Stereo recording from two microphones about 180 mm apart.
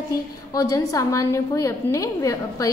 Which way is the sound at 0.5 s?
20° left (ahead or behind).